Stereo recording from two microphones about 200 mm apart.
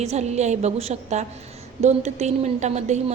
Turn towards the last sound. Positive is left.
turn(degrees=-35)  # may be behind; listen again after turning